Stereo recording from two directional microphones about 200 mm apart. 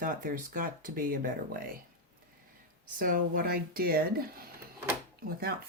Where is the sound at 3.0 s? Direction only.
45° right (ahead or behind).